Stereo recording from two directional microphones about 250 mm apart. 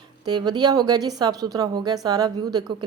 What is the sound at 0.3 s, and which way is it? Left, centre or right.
A woman's voice, centre.